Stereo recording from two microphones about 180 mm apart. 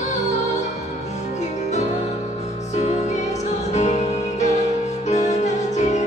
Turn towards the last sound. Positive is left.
turn(degrees=40)  # may be behind; listen again after turning